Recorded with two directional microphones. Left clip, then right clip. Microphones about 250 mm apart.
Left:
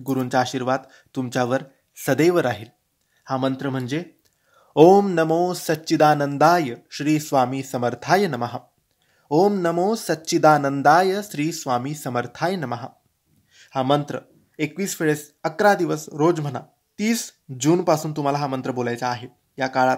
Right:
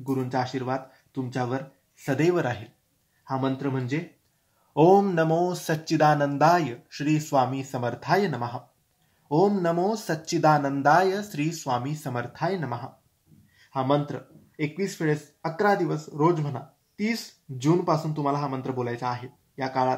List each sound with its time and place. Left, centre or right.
0.0 s speech: left